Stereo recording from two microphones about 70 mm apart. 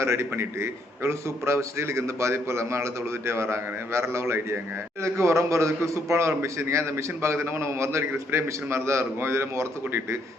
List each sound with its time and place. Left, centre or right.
0.0 s a man's voice: right